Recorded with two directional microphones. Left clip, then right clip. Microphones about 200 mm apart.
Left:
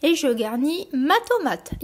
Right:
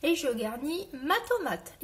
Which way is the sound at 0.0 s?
45° left (ahead or behind).